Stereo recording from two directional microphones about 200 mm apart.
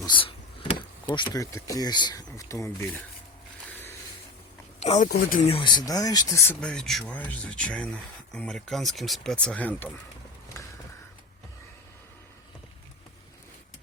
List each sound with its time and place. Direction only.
0.0 s speech: 25° left (ahead or behind)
3.7 s a sound: 10° left (ahead or behind)
4.8 s speech: 35° left (ahead or behind)
5.5 s speech: 25° left (ahead or behind); by 9.9 s 10° left (ahead or behind)